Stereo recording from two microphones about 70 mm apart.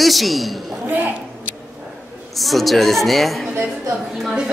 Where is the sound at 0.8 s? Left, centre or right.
Right.